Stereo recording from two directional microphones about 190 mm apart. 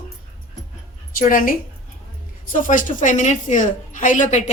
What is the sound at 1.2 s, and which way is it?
A woman's voice, 45° left (ahead or behind).